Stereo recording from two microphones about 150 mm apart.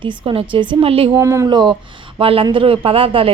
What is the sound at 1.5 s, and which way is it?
Speech, 30° right (ahead or behind).